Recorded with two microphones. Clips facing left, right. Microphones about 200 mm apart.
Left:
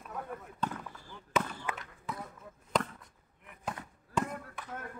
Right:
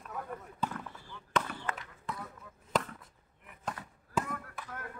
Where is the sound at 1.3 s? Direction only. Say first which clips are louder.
Left 1 dB; 5° left (ahead or behind).